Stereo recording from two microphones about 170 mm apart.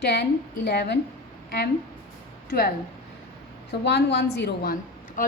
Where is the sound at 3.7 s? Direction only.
90° left; by 5.2 s 60° left (ahead or behind).